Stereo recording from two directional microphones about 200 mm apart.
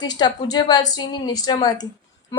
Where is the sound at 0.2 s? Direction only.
20° left (ahead or behind).